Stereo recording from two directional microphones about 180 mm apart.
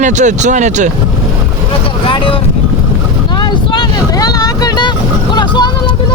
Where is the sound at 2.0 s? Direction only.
30° left (ahead or behind).